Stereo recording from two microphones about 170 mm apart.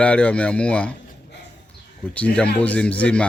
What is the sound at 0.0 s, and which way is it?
Speech, 5° left (ahead or behind).